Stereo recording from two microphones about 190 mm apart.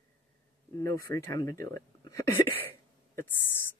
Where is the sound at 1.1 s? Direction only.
15° left (ahead or behind).